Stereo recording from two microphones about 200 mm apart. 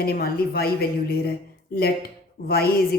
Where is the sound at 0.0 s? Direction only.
50° left (ahead or behind).